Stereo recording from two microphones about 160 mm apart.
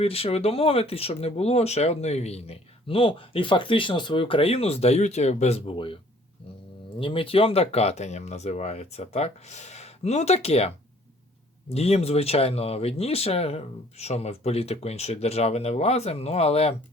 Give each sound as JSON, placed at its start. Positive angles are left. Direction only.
{"t": 0.0, "sound": "speech", "side_deg": 40}
{"t": 7.0, "sound": "speech", "side_deg": 35}
{"t": 11.7, "sound": "speech", "side_deg": 40}